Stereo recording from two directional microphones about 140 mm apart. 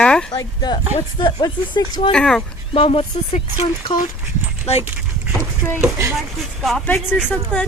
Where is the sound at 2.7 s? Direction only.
40° left (ahead or behind).